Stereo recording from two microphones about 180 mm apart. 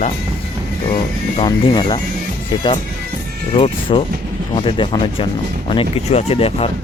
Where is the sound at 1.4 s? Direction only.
25° left (ahead or behind).